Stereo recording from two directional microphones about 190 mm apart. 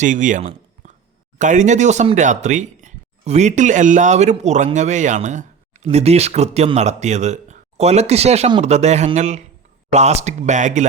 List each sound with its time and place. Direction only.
0.0 s speech: 40° right (ahead or behind)